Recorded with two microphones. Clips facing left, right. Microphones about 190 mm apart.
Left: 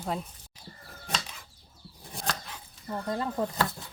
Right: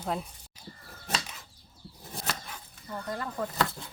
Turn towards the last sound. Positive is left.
turn(degrees=25)  # may be behind; listen again after turning